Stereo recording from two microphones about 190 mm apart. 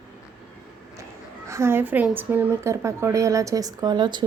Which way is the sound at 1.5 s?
15° right (ahead or behind).